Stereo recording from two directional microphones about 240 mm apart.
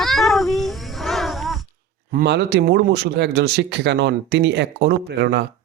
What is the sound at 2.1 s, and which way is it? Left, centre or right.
Speech, right.